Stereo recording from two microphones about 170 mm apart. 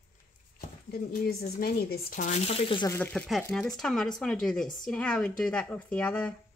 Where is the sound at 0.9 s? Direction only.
65° left (ahead or behind); by 2.9 s 30° left (ahead or behind).